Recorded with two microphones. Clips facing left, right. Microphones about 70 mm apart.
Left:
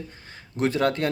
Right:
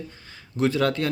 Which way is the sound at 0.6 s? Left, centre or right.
Left.